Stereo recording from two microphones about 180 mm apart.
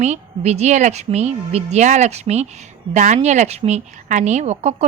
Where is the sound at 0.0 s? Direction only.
40° right (ahead or behind).